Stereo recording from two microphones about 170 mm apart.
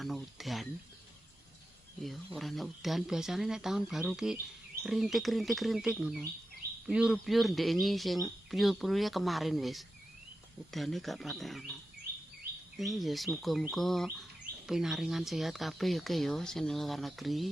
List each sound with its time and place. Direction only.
0.0 s speech: centre (ahead or behind)
2.0 s speech: centre (ahead or behind)
12.7 s speech: centre (ahead or behind)